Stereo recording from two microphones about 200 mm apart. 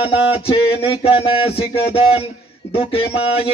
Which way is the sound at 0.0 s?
30° left (ahead or behind).